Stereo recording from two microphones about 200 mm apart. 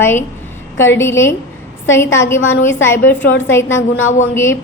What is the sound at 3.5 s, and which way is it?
Speech, 10° left (ahead or behind).